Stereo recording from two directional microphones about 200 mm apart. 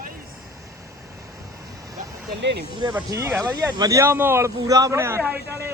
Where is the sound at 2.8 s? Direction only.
15° right (ahead or behind).